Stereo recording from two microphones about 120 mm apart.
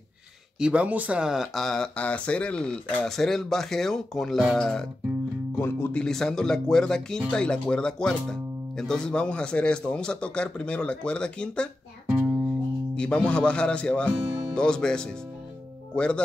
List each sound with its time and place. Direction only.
0.6 s speech: 10° right (ahead or behind)
5.6 s speech: 20° left (ahead or behind)
5.9 s speech: 5° left (ahead or behind)
12.9 s speech: 10° left (ahead or behind)